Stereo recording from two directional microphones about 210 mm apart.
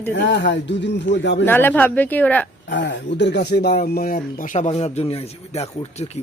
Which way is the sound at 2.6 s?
60° left (ahead or behind).